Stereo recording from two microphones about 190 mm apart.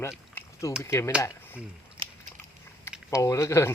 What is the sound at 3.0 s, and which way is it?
Speech, 15° left (ahead or behind).